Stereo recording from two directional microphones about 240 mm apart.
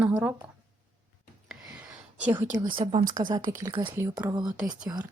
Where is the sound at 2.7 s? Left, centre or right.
Right.